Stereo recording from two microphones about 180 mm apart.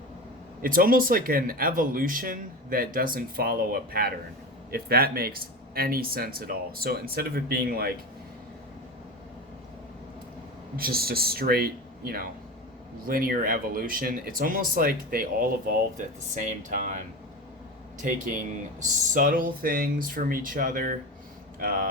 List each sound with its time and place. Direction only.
0.6 s speech: 50° right (ahead or behind)
10.8 s speech: 55° right (ahead or behind)
18.8 s speech: 45° right (ahead or behind)